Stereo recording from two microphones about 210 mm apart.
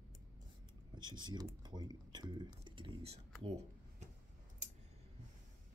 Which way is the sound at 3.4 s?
30° right (ahead or behind).